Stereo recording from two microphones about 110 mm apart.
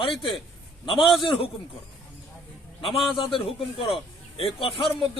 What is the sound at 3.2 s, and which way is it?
Speech, 55° left (ahead or behind).